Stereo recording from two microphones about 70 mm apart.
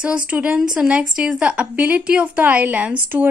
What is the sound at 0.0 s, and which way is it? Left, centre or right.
A woman's voice, centre.